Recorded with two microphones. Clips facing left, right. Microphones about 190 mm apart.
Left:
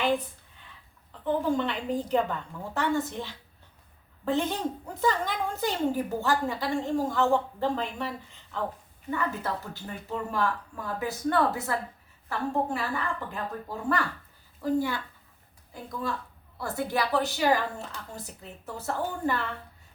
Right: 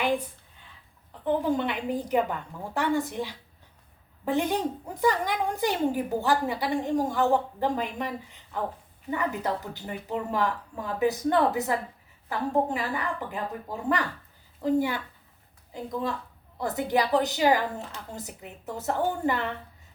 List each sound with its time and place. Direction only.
1.2 s a woman's voice: 15° right (ahead or behind)